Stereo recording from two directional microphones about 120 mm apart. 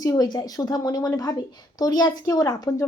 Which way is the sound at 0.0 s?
30° left (ahead or behind).